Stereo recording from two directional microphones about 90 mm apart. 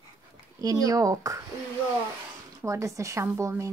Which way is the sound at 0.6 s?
40° right (ahead or behind).